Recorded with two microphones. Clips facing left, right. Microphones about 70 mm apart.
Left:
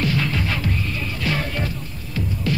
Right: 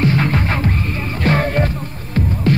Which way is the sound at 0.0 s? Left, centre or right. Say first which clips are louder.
Right 6 dB; right.